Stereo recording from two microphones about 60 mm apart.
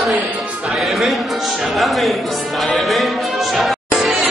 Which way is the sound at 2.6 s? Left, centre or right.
Centre.